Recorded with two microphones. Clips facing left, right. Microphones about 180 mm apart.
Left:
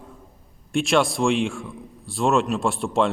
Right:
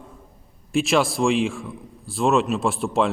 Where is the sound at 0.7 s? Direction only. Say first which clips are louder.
Even; centre (ahead or behind).